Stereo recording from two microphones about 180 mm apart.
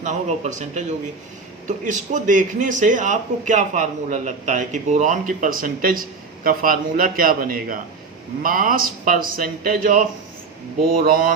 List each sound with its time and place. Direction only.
0.0 s a man's voice: 40° right (ahead or behind)